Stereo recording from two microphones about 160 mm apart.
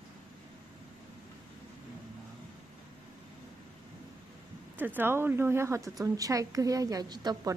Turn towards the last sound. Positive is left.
turn(degrees=-25)  # may be behind; listen again after turning